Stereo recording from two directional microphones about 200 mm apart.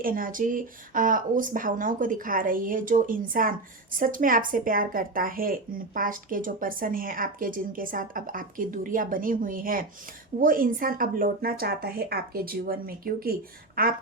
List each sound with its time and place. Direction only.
0.0 s speech: 45° right (ahead or behind)